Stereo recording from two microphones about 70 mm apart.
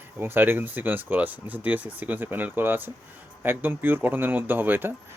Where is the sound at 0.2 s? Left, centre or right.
Right.